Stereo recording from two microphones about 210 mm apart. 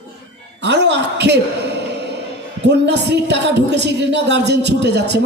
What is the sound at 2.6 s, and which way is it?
A man's voice, 55° right (ahead or behind).